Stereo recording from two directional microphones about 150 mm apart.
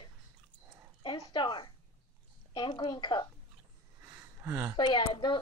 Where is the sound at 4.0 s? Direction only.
15° right (ahead or behind).